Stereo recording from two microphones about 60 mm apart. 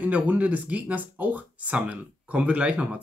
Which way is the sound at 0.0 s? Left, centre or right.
Right.